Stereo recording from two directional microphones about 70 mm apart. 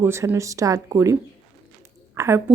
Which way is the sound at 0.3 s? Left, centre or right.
Right.